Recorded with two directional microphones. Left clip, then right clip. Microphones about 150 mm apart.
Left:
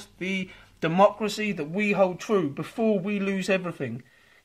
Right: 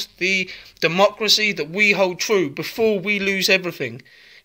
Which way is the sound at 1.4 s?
20° right (ahead or behind).